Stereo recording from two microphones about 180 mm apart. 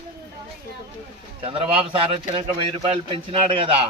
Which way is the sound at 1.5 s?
30° right (ahead or behind).